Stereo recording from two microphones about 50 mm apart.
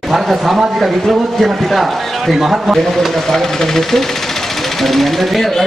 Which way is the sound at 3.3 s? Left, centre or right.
Centre.